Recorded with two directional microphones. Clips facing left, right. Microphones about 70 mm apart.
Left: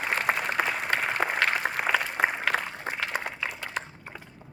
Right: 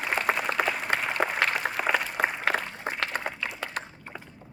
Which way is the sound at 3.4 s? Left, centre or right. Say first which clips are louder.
Left 1 dB; left.